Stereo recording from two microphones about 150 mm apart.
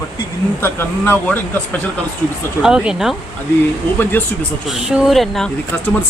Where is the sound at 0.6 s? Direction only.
15° left (ahead or behind).